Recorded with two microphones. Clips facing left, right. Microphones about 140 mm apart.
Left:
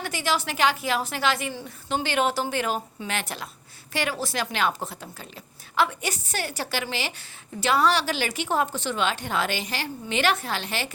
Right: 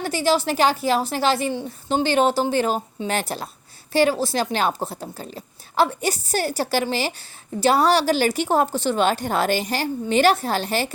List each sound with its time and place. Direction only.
0.0 s speech: 35° right (ahead or behind)